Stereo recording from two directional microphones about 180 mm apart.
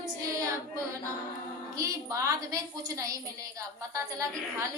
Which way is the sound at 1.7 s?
15° right (ahead or behind).